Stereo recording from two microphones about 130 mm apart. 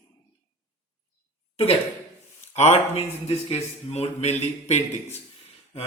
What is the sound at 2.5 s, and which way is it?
A man's voice, 60° left (ahead or behind).